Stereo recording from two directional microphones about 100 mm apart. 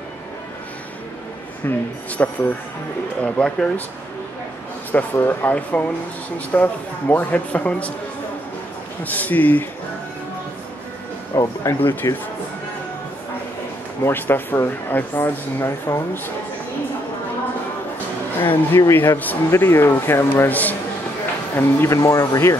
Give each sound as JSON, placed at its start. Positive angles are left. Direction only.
{"t": 1.6, "sound": "speech", "side_deg": 20}
{"t": 4.9, "sound": "speech", "side_deg": 20}
{"t": 9.0, "sound": "speech", "side_deg": 15}
{"t": 11.3, "sound": "speech", "side_deg": 30}
{"t": 11.9, "sound": "speech", "side_deg": 20}
{"t": 14.0, "sound": "speech", "side_deg": 20}
{"t": 18.7, "sound": "speech", "side_deg": 25}
{"t": 21.5, "sound": "speech", "side_deg": 25}